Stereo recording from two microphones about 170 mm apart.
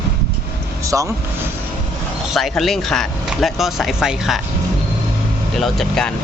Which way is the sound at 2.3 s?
Centre (ahead or behind).